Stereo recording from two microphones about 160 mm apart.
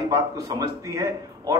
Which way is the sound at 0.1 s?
20° right (ahead or behind).